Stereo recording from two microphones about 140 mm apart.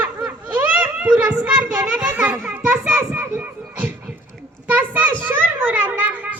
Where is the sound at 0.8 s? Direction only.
10° right (ahead or behind).